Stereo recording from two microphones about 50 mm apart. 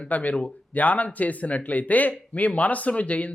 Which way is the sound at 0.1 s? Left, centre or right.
Left.